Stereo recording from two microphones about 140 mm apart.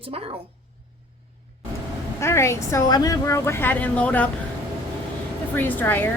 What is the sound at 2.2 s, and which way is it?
A woman's voice, 20° left (ahead or behind).